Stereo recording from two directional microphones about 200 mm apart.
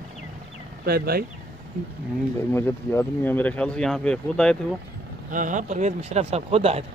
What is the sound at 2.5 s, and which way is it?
Speech, 10° left (ahead or behind).